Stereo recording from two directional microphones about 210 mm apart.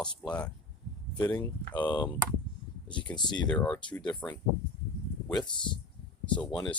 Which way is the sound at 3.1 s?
20° left (ahead or behind).